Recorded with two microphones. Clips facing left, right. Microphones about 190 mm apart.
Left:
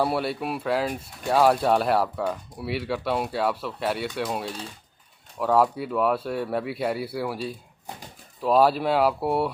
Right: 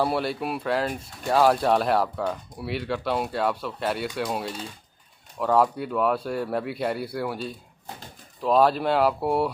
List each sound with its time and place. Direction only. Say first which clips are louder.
0.0 s speech: even; centre (ahead or behind)